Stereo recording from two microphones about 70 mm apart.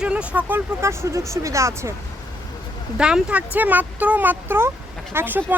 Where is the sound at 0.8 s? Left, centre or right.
Right.